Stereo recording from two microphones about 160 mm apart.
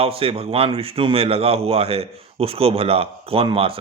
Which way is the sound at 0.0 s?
35° right (ahead or behind).